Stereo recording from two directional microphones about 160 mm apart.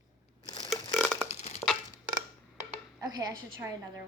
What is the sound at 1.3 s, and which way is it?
Crushing, 45° left (ahead or behind).